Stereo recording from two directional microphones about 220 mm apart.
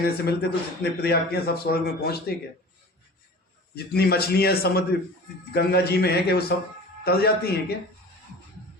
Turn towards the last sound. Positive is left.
turn(degrees=45)  # may be behind; listen again after turning